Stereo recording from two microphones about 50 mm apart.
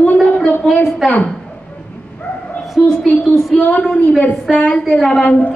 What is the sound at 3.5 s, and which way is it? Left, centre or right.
A woman's voice, left.